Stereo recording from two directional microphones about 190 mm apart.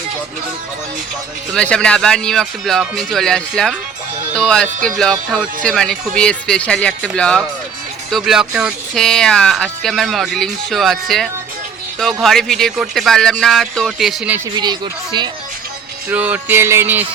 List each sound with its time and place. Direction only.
1.5 s speech: 5° left (ahead or behind)
14.5 s speech: 20° right (ahead or behind)
16.0 s music: 5° right (ahead or behind)